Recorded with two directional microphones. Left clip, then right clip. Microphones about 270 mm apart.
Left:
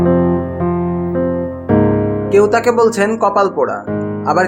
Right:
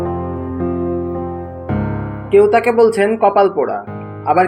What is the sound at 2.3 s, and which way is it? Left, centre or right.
Speech, centre.